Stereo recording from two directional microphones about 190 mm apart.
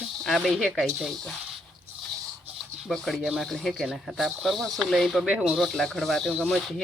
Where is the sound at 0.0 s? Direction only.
Centre (ahead or behind).